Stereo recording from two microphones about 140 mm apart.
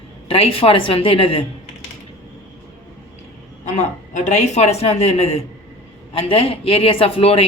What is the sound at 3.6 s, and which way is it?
A woman's voice, 60° left (ahead or behind).